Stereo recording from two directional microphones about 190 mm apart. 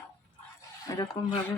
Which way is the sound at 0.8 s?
20° left (ahead or behind).